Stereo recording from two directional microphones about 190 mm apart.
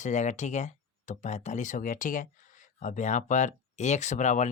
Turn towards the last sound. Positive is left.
turn(degrees=40)  # may be behind; listen again after turning